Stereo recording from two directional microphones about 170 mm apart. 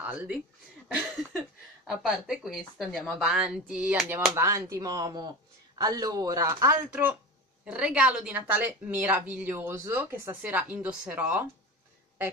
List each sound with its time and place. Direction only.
0.0 s a woman's voice: 5° right (ahead or behind)